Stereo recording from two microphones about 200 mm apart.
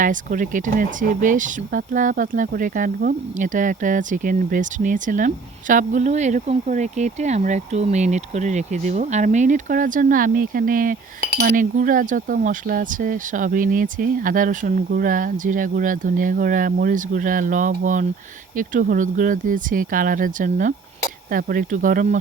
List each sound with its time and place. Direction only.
0.0 s speech: 40° right (ahead or behind)